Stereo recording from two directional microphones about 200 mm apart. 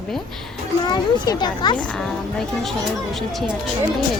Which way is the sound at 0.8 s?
20° left (ahead or behind).